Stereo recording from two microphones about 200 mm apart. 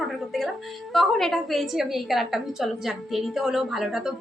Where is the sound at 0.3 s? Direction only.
Centre (ahead or behind).